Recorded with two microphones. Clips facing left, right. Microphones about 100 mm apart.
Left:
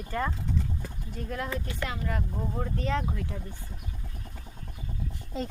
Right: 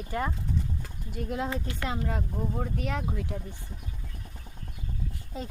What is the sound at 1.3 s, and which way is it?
Speech, 25° right (ahead or behind).